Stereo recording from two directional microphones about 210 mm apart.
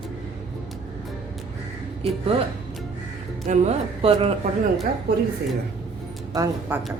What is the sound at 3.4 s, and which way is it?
Speech, 35° right (ahead or behind).